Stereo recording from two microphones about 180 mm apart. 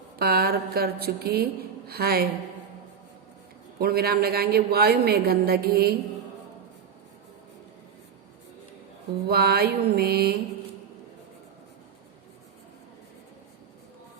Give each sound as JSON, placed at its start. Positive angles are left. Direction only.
{"t": 0.2, "sound": "a woman's voice", "side_deg": -60}
{"t": 3.8, "sound": "a woman's voice", "side_deg": -60}
{"t": 9.2, "sound": "a woman's voice", "side_deg": -60}